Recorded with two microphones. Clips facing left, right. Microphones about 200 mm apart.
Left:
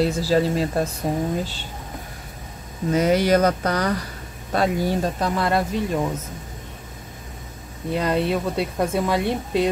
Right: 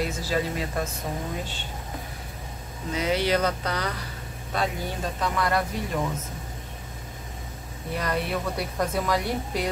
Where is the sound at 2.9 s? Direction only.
45° left (ahead or behind); by 5.7 s 25° left (ahead or behind).